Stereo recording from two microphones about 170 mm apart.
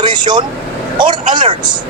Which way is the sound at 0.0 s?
25° right (ahead or behind).